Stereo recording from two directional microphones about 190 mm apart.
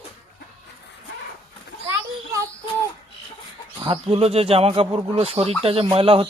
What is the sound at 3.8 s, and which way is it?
Speech, 30° right (ahead or behind).